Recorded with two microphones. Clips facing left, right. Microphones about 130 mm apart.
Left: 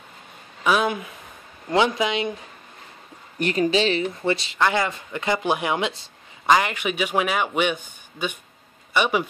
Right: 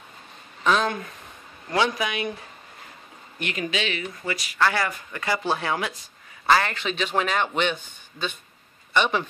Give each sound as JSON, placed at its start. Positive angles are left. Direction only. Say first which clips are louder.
{"t": 0.7, "sound": "a sound", "louder": "left 1 dB", "side_deg": 10}
{"t": 1.7, "sound": "speech", "louder": "left 4 dB", "side_deg": 20}
{"t": 3.3, "sound": "speech", "louder": "left 8 dB", "side_deg": 35}